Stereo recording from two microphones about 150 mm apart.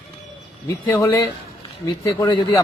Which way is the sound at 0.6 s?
25° left (ahead or behind).